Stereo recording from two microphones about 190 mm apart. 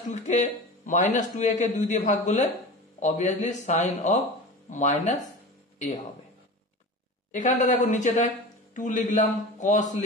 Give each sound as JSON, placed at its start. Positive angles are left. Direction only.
{"t": 0.1, "sound": "a man's voice", "side_deg": 40}
{"t": 7.3, "sound": "a man's voice", "side_deg": 40}